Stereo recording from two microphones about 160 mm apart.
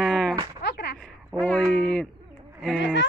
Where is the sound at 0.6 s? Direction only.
90° left.